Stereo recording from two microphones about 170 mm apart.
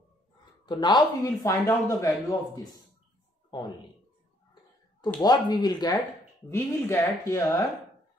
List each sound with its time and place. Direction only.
0.7 s speech: 25° left (ahead or behind)
5.2 s speech: 25° left (ahead or behind)